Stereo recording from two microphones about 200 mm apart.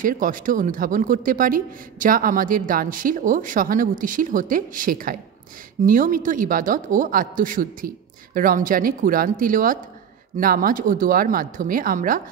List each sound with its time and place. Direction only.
0.0 s speech: 45° right (ahead or behind)